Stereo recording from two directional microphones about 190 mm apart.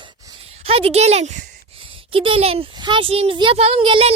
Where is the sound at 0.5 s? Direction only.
30° right (ahead or behind).